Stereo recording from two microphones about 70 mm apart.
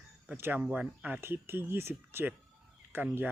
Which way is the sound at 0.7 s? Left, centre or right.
Right.